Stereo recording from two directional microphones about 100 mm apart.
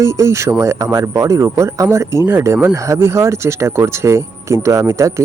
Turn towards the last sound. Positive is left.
turn(degrees=-30)  # may be behind; listen again after turning